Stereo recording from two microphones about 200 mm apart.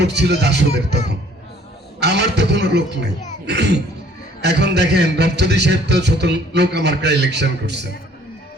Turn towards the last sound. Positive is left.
turn(degrees=-60)  # may be behind; listen again after turning